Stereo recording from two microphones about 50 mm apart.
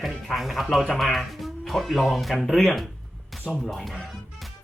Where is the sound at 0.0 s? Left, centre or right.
Centre.